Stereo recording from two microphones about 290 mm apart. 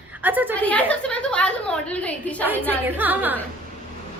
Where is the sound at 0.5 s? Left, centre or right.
Centre.